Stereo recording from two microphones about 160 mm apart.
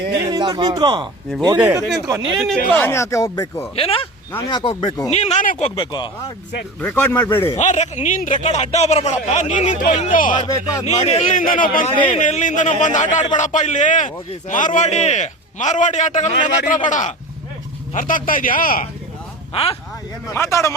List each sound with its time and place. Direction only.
0.1 s speech: 25° right (ahead or behind)
2.7 s speech: 15° left (ahead or behind)
3.8 s speech: 35° left (ahead or behind)
5.1 s a man's voice: 45° left (ahead or behind); by 6.3 s 25° left (ahead or behind)
6.8 s speech: 10° left (ahead or behind)
7.6 s a man's voice: 45° left (ahead or behind)
10.3 s speech: 30° left (ahead or behind)
10.8 s a man's voice: 40° left (ahead or behind)
11.3 s a man's voice: 55° left (ahead or behind)
19.5 s speech: 40° left (ahead or behind)
20.3 s speech: 15° left (ahead or behind)